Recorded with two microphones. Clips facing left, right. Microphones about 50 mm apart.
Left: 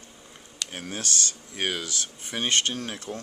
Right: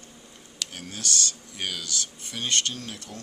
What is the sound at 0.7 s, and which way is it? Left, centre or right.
Speech, left.